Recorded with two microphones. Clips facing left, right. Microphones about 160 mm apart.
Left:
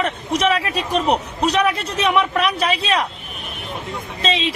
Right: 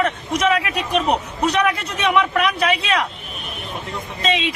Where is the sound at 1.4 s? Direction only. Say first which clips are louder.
Left 1 dB; 30° left (ahead or behind).